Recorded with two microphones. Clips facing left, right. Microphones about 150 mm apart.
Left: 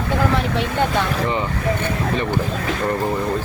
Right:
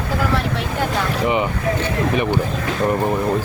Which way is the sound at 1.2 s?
15° right (ahead or behind).